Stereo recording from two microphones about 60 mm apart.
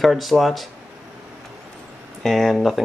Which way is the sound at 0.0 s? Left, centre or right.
Centre.